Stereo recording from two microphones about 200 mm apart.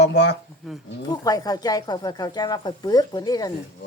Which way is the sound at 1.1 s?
20° left (ahead or behind).